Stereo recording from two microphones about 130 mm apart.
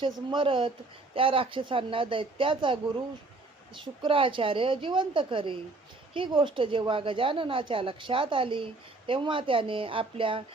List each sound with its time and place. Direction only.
0.0 s a woman's voice: 40° right (ahead or behind)
4.0 s a woman's voice: 40° right (ahead or behind)